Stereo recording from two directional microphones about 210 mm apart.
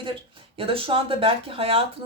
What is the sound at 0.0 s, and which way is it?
Speech, 25° right (ahead or behind).